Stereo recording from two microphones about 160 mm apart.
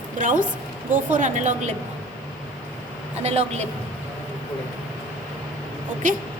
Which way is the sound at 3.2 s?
45° right (ahead or behind).